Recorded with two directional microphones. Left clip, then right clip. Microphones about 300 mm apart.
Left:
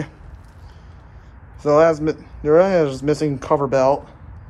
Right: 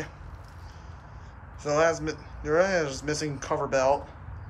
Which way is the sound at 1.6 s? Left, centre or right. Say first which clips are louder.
Left 10 dB; left.